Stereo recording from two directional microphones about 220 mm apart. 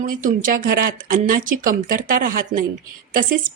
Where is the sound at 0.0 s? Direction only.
35° right (ahead or behind).